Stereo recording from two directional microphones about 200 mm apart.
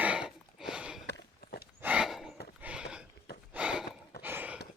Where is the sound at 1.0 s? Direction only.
55° left (ahead or behind).